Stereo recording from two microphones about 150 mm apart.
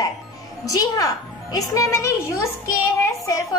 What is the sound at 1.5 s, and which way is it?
Child singing, 20° left (ahead or behind).